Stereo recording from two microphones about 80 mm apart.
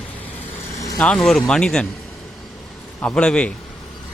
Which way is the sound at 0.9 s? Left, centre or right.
Centre.